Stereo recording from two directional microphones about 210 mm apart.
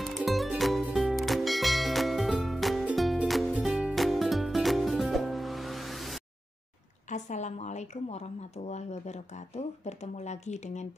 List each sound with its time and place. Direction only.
0.0 s music: centre (ahead or behind)
7.1 s a woman's voice: 35° left (ahead or behind)